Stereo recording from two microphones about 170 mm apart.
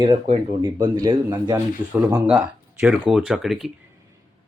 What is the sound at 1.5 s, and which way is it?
Speech, 10° right (ahead or behind).